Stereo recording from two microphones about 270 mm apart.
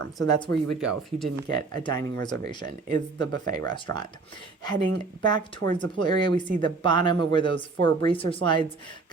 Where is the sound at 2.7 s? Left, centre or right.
Right.